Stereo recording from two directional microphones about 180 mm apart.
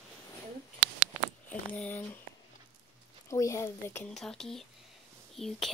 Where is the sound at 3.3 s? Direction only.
15° left (ahead or behind).